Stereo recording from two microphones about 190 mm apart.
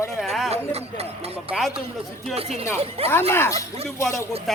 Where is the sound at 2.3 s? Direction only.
30° right (ahead or behind).